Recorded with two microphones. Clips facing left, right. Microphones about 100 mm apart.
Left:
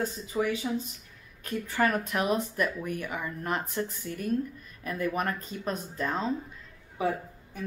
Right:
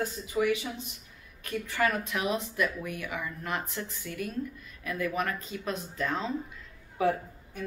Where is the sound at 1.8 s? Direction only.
45° left (ahead or behind).